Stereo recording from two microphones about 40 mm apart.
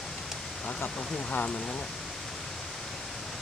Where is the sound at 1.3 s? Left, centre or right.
Left.